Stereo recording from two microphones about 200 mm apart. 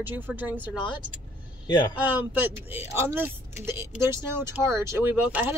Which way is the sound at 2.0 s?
10° right (ahead or behind).